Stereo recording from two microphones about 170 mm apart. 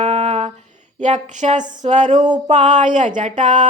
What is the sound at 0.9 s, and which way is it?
Music, 45° right (ahead or behind).